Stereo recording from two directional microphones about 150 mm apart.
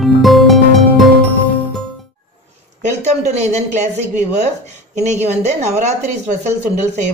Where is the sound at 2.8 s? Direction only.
50° right (ahead or behind).